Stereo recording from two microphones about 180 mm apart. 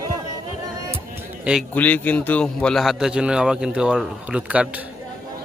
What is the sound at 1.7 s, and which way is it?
A man's voice, 10° left (ahead or behind).